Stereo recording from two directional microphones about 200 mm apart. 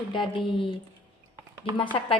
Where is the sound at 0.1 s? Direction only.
25° left (ahead or behind).